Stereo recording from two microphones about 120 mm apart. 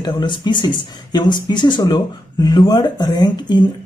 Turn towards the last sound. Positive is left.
turn(degrees=35)  # may be behind; listen again after turning